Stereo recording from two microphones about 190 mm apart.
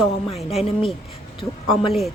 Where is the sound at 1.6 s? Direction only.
Centre (ahead or behind).